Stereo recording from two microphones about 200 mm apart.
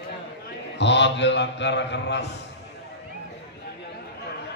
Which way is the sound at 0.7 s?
60° left (ahead or behind).